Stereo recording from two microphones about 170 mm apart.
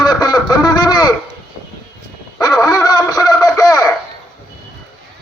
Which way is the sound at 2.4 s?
25° left (ahead or behind).